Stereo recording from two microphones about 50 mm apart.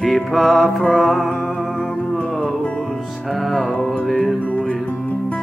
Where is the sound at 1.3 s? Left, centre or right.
Centre.